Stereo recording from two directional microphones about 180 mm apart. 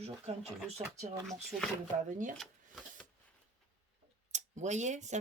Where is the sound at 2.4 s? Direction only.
Centre (ahead or behind).